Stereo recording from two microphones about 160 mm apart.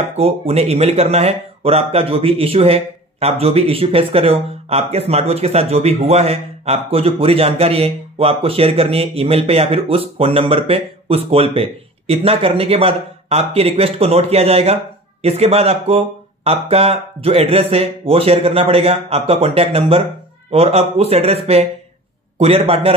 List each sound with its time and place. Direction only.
0.1 s speech: 40° right (ahead or behind)